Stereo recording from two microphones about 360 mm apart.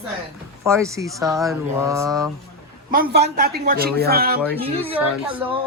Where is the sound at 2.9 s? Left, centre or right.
Right.